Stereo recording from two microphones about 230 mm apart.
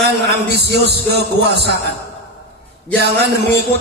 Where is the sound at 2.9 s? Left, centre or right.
Right.